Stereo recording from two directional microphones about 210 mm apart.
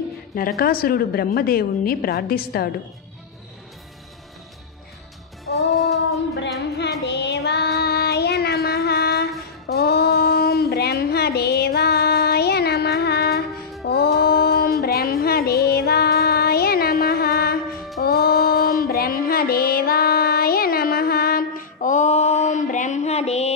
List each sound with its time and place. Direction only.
0.3 s a woman's voice: 45° left (ahead or behind)
5.7 s female singing: centre (ahead or behind)
6.8 s child singing: 55° left (ahead or behind)
9.7 s a sound: 50° left (ahead or behind)
13.8 s music: 50° left (ahead or behind); by 23.5 s 30° left (ahead or behind)